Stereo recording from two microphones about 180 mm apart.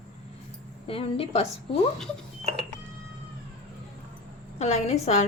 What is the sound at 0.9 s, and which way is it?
Speech, 30° left (ahead or behind).